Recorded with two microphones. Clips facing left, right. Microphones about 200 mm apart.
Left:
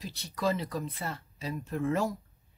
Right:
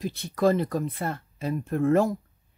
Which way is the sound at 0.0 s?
55° right (ahead or behind).